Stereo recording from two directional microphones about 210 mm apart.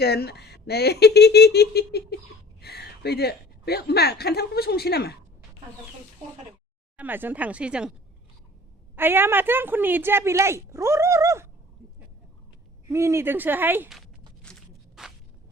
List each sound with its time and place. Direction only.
0.0 s a woman's voice: 50° left (ahead or behind)
6.9 s speech: 10° right (ahead or behind)
9.0 s speech: 10° right (ahead or behind)
12.9 s speech: 15° right (ahead or behind)
15.0 s a sound: centre (ahead or behind)